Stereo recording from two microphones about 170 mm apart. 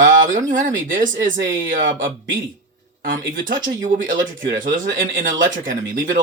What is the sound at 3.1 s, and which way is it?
Speech, 55° right (ahead or behind).